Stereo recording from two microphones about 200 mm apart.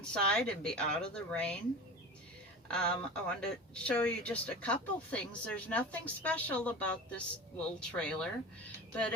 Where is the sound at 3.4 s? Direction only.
5° left (ahead or behind).